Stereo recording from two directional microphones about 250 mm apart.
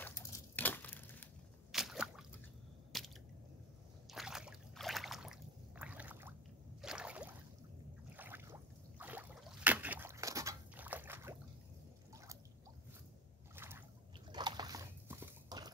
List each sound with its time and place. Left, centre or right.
0.0 s a sound: centre
2.9 s squish: centre
4.1 s a sound: centre
8.2 s rowboat: centre
13.6 s boat: centre
14.3 s dog: centre